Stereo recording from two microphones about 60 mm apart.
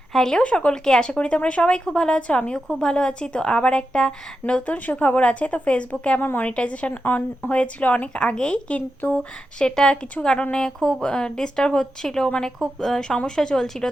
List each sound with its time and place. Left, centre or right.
0.1 s a woman's voice: centre